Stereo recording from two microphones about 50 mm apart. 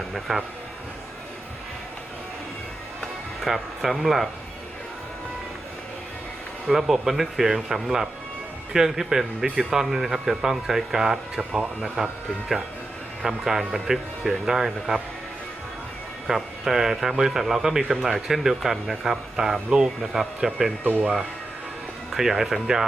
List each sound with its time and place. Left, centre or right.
0.1 s speech: centre
3.4 s speech: centre
6.7 s speech: centre
13.2 s speech: centre
16.2 s speech: centre
22.1 s speech: centre